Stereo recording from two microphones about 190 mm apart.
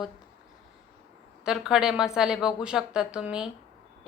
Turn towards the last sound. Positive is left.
turn(degrees=-5)  # may be behind; listen again after turning